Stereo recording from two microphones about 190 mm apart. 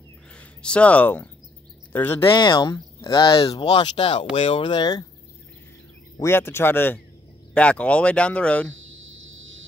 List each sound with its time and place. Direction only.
0.3 s speech: 5° left (ahead or behind)
2.3 s speech: 25° left (ahead or behind)
6.1 s speech: 15° left (ahead or behind)
8.7 s a sound: 90° right